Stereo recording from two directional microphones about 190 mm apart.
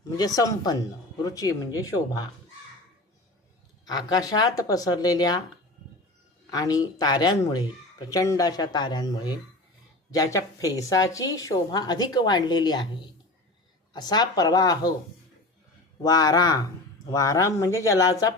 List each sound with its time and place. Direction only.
0.2 s speech: 20° left (ahead or behind)
3.8 s speech: 20° left (ahead or behind)
6.5 s speech: 20° left (ahead or behind)
13.9 s speech: 20° left (ahead or behind)
16.0 s speech: 20° left (ahead or behind)